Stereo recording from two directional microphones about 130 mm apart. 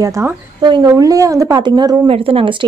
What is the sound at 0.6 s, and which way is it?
Speech, 35° right (ahead or behind).